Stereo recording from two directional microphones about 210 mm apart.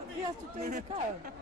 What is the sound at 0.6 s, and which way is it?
Speech, 30° right (ahead or behind).